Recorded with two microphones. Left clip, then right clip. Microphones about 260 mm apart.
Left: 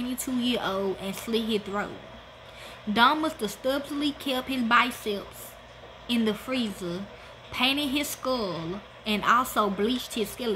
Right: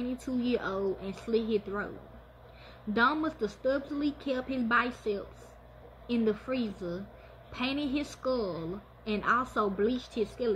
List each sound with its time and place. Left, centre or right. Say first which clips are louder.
0.4 s a woman's voice: left 4 dB; left
2.9 s a woman's voice: left 6 dB; left